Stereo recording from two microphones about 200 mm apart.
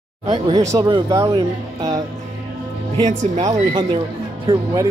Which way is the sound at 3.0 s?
35° right (ahead or behind).